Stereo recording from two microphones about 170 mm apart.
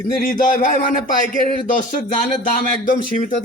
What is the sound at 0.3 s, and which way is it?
Speech, 50° left (ahead or behind).